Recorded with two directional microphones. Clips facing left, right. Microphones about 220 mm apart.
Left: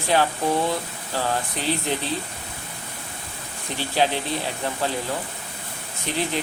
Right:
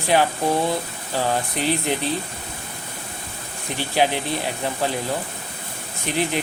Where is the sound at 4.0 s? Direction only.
15° right (ahead or behind).